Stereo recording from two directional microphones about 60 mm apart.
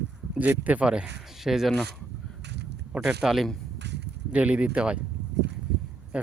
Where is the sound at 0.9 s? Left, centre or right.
Centre.